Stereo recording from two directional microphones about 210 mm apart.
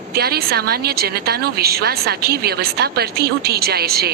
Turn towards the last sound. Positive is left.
turn(degrees=-50)  # may be behind; listen again after turning